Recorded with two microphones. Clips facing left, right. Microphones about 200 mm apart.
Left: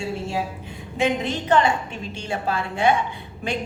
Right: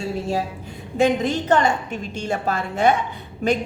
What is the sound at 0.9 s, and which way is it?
A woman's voice, 40° right (ahead or behind).